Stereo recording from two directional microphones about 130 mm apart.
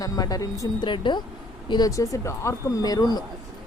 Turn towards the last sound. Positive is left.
turn(degrees=30)  # may be behind; listen again after turning